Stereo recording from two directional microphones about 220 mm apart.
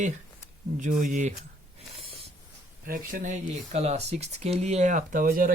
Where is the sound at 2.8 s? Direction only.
40° right (ahead or behind).